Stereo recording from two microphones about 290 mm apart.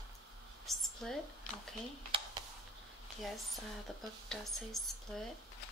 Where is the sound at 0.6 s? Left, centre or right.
Centre.